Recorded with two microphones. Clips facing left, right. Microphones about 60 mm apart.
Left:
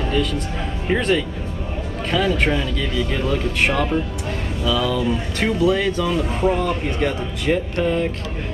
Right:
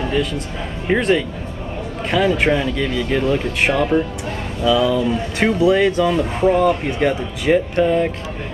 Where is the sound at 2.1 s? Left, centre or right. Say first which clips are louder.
Right 3 dB; centre.